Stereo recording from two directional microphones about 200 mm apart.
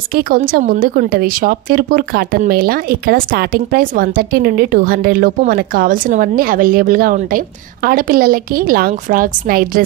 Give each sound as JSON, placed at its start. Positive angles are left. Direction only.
{"t": 0.1, "sound": "a woman's voice", "side_deg": -45}